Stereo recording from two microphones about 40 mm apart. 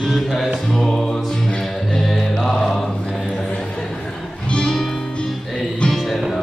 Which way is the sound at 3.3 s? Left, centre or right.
Centre.